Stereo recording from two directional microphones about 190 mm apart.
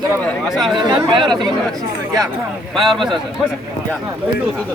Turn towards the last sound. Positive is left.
turn(degrees=0)  # may be behind; listen again after turning